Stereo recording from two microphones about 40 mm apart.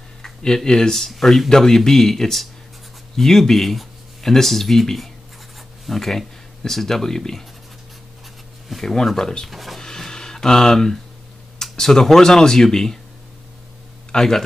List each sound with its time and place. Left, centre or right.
0.2 s a sound: centre
0.7 s speech: centre
8.8 s speech: centre
9.5 s speech: centre
9.8 s a sound: centre
11.7 s speech: centre
14.1 s speech: centre